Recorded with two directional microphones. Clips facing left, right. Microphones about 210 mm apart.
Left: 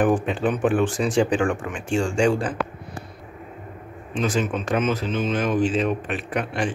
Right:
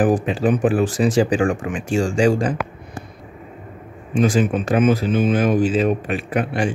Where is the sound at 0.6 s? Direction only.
35° right (ahead or behind).